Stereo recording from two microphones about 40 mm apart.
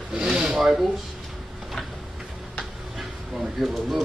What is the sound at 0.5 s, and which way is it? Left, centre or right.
Speech, centre.